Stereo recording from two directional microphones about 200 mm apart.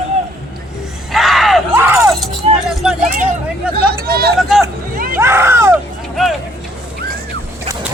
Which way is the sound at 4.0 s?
50° right (ahead or behind).